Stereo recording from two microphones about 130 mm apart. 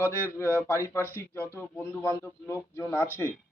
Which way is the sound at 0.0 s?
20° left (ahead or behind).